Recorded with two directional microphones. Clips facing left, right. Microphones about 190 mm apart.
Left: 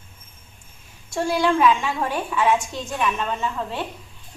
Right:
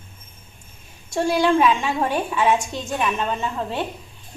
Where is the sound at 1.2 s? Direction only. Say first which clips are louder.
Right 1 dB; 25° right (ahead or behind).